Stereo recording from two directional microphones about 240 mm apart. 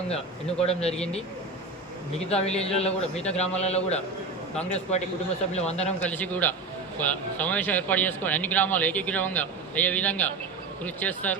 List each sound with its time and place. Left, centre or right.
0.6 s a man's voice: left
2.1 s a man's voice: left
6.0 s a man's voice: centre